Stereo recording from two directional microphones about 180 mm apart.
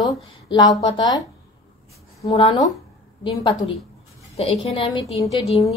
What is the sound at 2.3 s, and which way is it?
A woman's voice, 35° left (ahead or behind).